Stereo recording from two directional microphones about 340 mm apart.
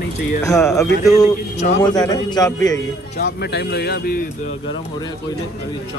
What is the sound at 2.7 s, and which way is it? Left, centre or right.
A man's voice, left.